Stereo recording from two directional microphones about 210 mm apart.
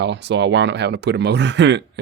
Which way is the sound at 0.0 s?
55° right (ahead or behind).